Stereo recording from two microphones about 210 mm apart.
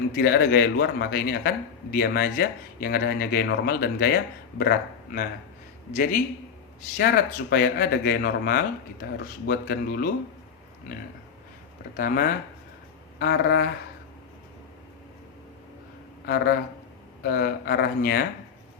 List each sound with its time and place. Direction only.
0.1 s a man's voice: 50° left (ahead or behind)
7.5 s a man's voice: 50° left (ahead or behind)
11.9 s a man's voice: 45° left (ahead or behind)
16.2 s a man's voice: 50° left (ahead or behind)